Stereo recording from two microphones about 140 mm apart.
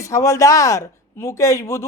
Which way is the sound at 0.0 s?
20° left (ahead or behind).